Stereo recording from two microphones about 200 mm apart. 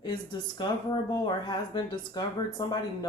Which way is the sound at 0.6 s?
20° left (ahead or behind).